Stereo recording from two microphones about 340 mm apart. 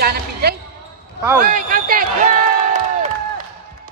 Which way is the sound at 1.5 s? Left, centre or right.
Right.